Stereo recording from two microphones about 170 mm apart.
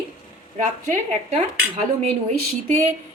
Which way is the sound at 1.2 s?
40° right (ahead or behind).